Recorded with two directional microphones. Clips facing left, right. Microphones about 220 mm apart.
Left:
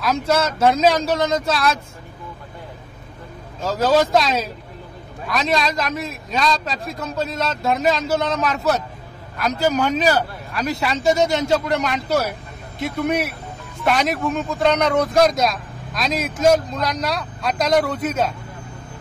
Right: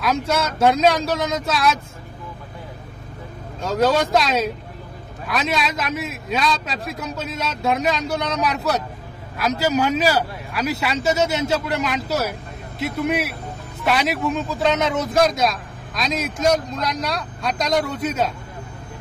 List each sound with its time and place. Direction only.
0.0 s a man's voice: centre (ahead or behind)
3.6 s a man's voice: centre (ahead or behind)